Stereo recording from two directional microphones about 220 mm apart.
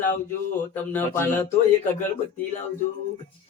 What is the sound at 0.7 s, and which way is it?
Mantra, 10° left (ahead or behind).